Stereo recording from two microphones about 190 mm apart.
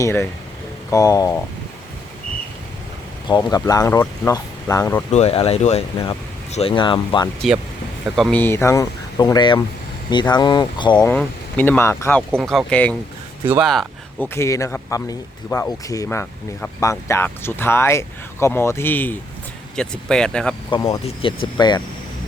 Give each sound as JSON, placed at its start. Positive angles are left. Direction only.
{"t": 0.0, "sound": "speech", "side_deg": 15}
{"t": 3.2, "sound": "speech", "side_deg": 20}
{"t": 5.1, "sound": "speech", "side_deg": 30}
{"t": 8.0, "sound": "speech", "side_deg": 0}
{"t": 8.4, "sound": "speech", "side_deg": 10}
{"t": 10.9, "sound": "speech", "side_deg": 5}
{"t": 12.4, "sound": "speech", "side_deg": 0}
{"t": 14.3, "sound": "speech", "side_deg": 15}
{"t": 20.7, "sound": "speech", "side_deg": 25}